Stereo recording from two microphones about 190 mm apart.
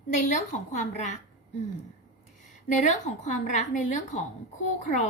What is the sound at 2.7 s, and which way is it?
A woman's voice, 40° left (ahead or behind).